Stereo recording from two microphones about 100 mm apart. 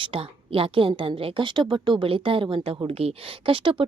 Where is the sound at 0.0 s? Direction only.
65° right (ahead or behind).